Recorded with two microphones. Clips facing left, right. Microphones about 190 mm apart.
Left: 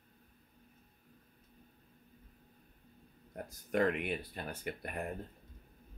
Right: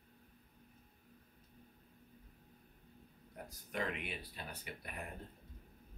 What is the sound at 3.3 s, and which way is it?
Speech, 50° left (ahead or behind).